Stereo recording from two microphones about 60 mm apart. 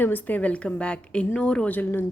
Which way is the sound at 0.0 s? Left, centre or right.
Left.